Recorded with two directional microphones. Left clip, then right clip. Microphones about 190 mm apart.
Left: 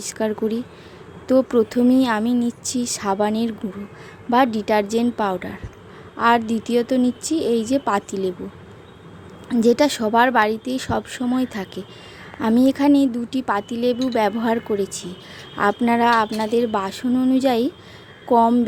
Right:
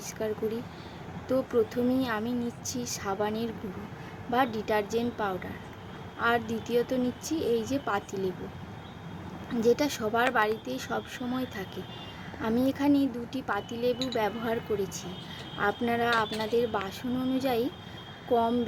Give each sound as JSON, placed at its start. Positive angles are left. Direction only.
{"t": 0.0, "sound": "speech", "side_deg": 50}
{"t": 9.6, "sound": "speech", "side_deg": 50}